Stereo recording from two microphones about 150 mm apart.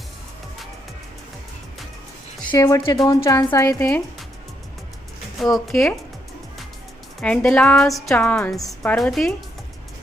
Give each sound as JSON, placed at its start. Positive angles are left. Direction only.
{"t": 2.4, "sound": "speech", "side_deg": 25}
{"t": 5.5, "sound": "a woman's voice", "side_deg": 0}
{"t": 7.2, "sound": "a woman's voice", "side_deg": 5}